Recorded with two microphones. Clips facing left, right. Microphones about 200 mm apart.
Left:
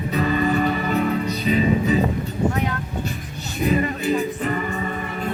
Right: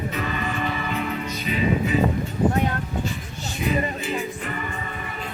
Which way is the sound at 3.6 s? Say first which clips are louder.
Left 4 dB; 45° left (ahead or behind).